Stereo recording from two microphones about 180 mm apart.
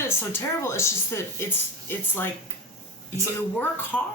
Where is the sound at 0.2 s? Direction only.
15° left (ahead or behind).